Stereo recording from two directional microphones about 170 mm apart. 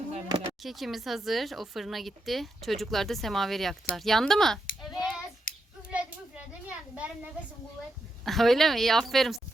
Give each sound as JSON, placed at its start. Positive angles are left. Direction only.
{"t": 0.6, "sound": "speech", "side_deg": 0}
{"t": 4.8, "sound": "child singing", "side_deg": 0}
{"t": 5.5, "sound": "hands", "side_deg": 55}
{"t": 5.9, "sound": "children playing", "side_deg": -5}
{"t": 8.2, "sound": "speech", "side_deg": 0}